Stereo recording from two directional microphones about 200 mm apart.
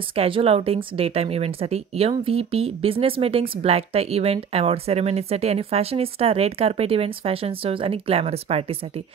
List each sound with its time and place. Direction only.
0.1 s speech: 30° right (ahead or behind)